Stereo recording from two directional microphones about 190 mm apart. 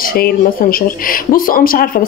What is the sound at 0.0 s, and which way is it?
Speech, 50° left (ahead or behind).